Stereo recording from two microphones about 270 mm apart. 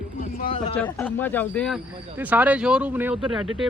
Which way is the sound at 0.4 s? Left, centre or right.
Left.